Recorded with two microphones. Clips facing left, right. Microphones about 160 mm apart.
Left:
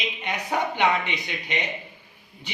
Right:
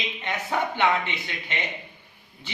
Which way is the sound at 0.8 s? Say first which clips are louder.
Even; 15° left (ahead or behind).